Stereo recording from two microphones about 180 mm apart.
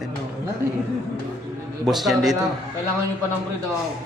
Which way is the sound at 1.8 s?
Centre (ahead or behind).